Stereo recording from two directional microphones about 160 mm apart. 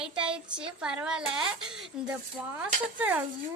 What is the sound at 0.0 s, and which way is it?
A child's voice, 5° right (ahead or behind).